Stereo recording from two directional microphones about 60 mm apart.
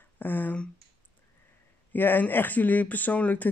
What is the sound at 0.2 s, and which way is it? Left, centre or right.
Speech, left.